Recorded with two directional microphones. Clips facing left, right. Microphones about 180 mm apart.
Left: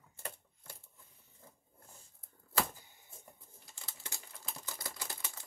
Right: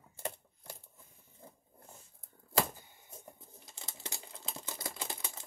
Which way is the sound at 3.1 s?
20° right (ahead or behind).